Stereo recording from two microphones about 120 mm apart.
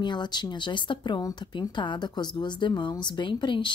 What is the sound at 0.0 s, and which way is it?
Speech, 40° left (ahead or behind).